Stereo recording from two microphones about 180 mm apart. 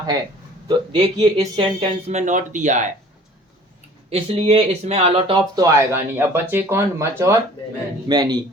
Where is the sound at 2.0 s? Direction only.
40° right (ahead or behind).